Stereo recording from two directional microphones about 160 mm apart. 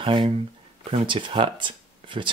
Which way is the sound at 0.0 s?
30° right (ahead or behind).